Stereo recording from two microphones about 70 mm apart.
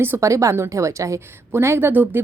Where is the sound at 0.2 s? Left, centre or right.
Right.